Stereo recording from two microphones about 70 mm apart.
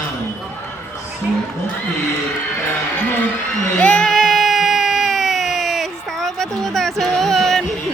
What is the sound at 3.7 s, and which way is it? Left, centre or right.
Music, centre.